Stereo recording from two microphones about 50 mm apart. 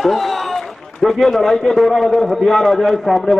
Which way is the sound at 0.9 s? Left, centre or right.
Centre.